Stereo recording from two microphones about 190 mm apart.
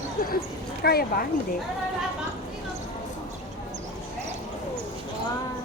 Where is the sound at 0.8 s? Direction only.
55° left (ahead or behind).